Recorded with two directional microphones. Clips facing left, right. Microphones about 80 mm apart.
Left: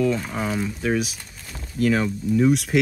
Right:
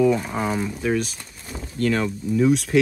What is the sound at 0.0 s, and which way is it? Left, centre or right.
Speech, centre.